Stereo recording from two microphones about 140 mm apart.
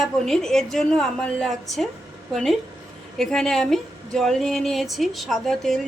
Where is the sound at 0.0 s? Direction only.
5° left (ahead or behind).